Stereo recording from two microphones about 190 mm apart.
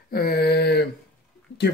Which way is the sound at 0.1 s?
55° left (ahead or behind).